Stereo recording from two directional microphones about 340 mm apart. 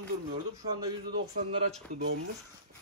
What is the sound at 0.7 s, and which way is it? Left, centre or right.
Speech, centre.